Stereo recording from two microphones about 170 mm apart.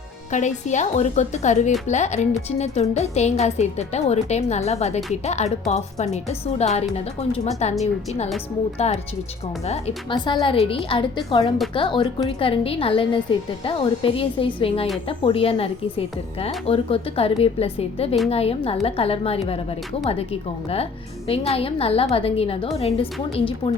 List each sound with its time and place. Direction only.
0.3 s speech: 45° left (ahead or behind)
8.8 s speech: 40° left (ahead or behind)
21.2 s speech: 35° left (ahead or behind)